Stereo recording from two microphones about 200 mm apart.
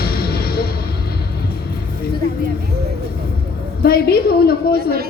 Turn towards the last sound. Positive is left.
turn(degrees=50)  # may be behind; listen again after turning